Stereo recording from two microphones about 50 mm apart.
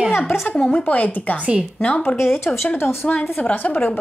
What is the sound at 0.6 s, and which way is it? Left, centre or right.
Speech, left.